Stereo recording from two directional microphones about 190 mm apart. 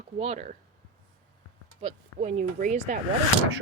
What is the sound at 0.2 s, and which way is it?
Speech, 35° right (ahead or behind).